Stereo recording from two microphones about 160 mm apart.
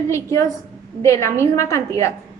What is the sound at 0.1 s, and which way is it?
A woman's voice, 20° left (ahead or behind).